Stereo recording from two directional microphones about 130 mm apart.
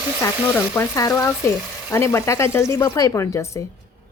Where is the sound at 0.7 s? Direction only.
20° left (ahead or behind).